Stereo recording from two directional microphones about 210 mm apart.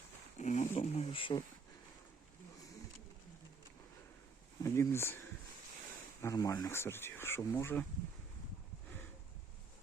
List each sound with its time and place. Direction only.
0.3 s speech: 35° left (ahead or behind)
4.6 s speech: 10° left (ahead or behind)
6.2 s speech: 15° left (ahead or behind)